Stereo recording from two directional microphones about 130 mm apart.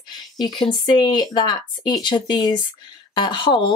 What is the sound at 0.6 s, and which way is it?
Speech, 35° left (ahead or behind).